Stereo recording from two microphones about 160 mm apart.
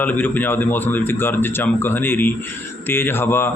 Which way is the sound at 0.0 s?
10° left (ahead or behind).